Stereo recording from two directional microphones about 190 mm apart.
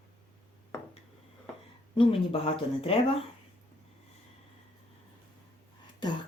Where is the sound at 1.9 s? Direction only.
30° left (ahead or behind).